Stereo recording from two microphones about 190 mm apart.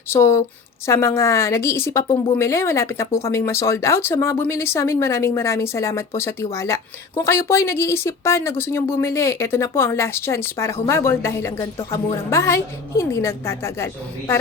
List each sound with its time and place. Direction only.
0.1 s speech: 15° left (ahead or behind)